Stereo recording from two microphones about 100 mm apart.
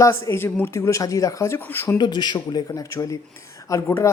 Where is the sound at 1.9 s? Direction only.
45° left (ahead or behind).